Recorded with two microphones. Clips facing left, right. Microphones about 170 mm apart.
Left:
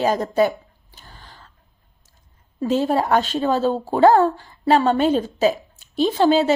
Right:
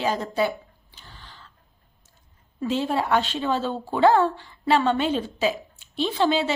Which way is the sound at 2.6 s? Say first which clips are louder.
Left 5 dB; 40° left (ahead or behind).